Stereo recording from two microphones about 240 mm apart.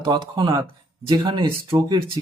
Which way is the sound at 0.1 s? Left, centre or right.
Centre.